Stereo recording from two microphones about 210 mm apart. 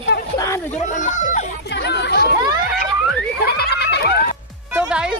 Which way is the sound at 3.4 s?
50° left (ahead or behind).